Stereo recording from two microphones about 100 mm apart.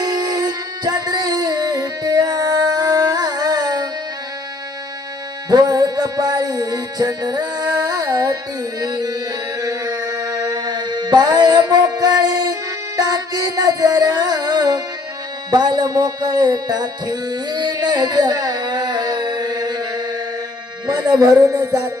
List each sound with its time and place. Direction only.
0.0 s music: 40° right (ahead or behind)
5.5 s music: 40° right (ahead or behind)
20.8 s a man's voice: 40° right (ahead or behind)